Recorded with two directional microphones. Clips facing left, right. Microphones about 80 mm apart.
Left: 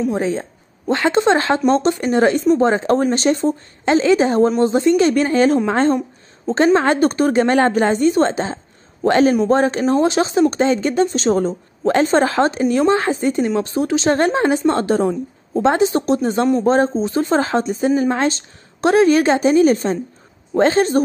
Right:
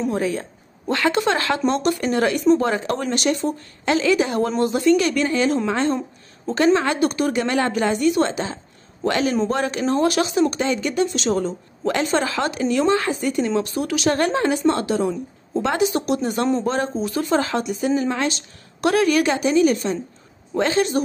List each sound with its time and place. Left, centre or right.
0.1 s a woman's voice: left
15.0 s a woman's voice: left